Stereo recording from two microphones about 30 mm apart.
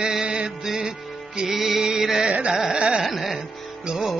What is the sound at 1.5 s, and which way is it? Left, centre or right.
Music, centre.